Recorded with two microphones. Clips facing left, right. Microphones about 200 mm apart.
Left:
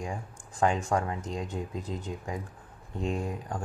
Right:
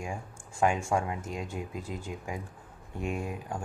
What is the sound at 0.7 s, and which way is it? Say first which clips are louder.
Speech: left 1 dB; 10° right (ahead or behind).